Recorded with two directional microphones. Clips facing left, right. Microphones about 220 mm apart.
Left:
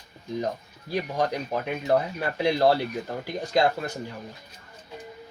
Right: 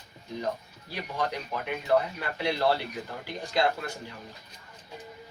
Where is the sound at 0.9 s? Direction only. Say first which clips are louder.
Left 6 dB; 40° left (ahead or behind).